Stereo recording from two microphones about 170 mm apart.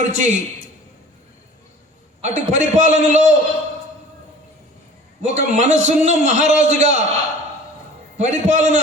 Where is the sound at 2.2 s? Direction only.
45° right (ahead or behind).